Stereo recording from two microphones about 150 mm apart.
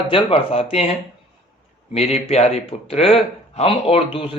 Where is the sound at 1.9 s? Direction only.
45° left (ahead or behind).